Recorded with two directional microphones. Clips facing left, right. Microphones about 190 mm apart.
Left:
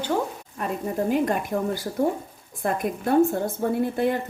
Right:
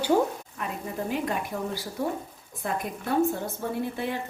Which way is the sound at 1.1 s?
50° left (ahead or behind).